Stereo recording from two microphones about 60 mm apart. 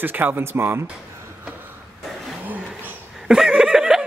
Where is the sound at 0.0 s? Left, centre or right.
Right.